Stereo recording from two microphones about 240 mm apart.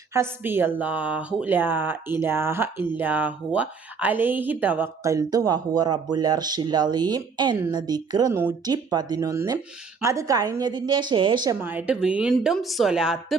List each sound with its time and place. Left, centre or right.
0.1 s speech: centre